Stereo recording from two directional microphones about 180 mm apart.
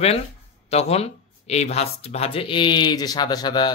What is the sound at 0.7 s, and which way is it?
Speech, 35° left (ahead or behind).